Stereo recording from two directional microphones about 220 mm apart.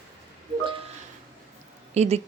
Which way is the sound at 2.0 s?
30° right (ahead or behind).